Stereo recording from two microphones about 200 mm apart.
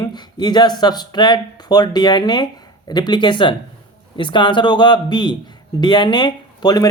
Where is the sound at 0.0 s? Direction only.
20° left (ahead or behind).